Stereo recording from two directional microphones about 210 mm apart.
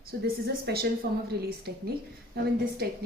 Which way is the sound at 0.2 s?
50° right (ahead or behind).